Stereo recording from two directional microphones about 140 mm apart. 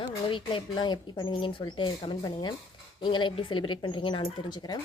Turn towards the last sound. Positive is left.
turn(degrees=30)  # may be behind; listen again after turning